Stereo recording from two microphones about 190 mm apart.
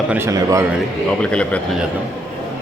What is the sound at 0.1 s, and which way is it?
Speech, 15° right (ahead or behind).